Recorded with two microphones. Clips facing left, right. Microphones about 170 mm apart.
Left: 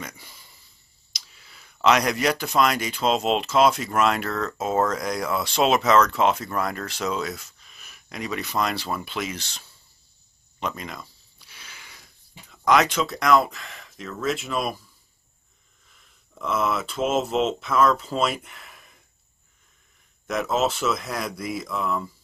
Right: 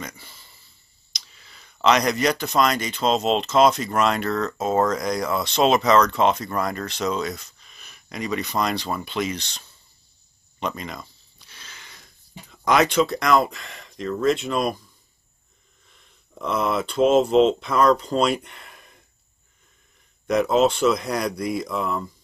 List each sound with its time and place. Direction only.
0.0 s a sound: 10° left (ahead or behind)
1.1 s speech: 5° left (ahead or behind)
10.6 s a sound: centre (ahead or behind)
12.6 s speech: centre (ahead or behind)
15.9 s speech: centre (ahead or behind)
20.2 s speech: centre (ahead or behind)